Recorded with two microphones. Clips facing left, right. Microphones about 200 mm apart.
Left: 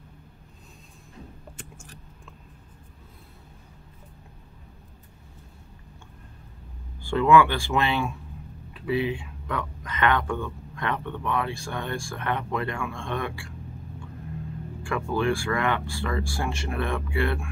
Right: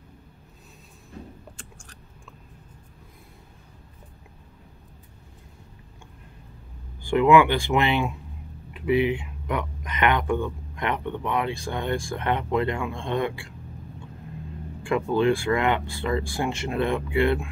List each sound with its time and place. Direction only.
1.6 s a sound: 5° left (ahead or behind)
7.0 s speech: 15° right (ahead or behind)
14.8 s speech: 20° right (ahead or behind)